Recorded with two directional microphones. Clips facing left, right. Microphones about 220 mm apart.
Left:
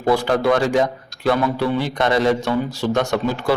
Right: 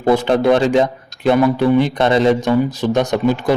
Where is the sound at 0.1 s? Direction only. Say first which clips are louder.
Right 4 dB; 20° right (ahead or behind).